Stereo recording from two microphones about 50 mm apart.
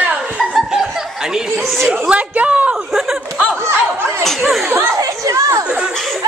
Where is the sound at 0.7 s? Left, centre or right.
Centre.